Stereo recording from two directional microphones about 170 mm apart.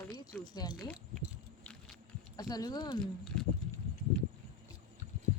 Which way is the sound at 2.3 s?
25° left (ahead or behind).